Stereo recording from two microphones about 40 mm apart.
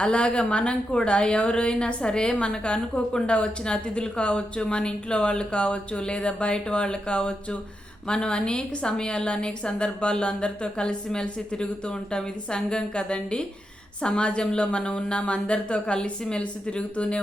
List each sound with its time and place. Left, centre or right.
0.0 s a woman's voice: left